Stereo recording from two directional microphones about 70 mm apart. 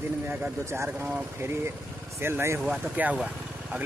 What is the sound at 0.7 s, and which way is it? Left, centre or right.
Speech, right.